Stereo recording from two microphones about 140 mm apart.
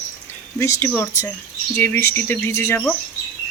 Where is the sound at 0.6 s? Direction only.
20° left (ahead or behind).